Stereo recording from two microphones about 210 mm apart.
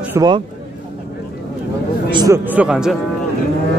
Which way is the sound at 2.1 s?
20° right (ahead or behind).